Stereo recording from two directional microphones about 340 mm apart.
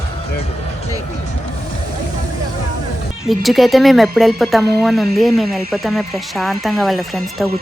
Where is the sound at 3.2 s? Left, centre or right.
Centre.